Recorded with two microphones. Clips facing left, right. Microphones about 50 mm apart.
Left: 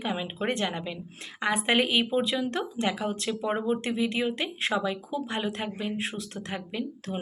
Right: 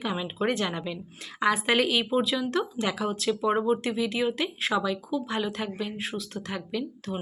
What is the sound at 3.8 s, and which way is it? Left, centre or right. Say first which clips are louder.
Speech: right 1 dB; left.